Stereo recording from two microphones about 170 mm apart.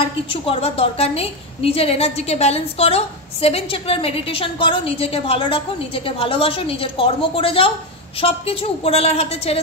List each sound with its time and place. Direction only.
0.3 s a woman's voice: 35° left (ahead or behind)